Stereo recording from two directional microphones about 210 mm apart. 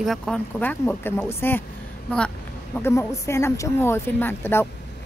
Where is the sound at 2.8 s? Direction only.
15° left (ahead or behind).